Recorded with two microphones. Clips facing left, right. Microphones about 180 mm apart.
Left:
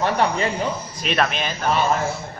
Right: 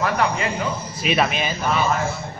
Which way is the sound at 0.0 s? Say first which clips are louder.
Left 1 dB; 30° left (ahead or behind).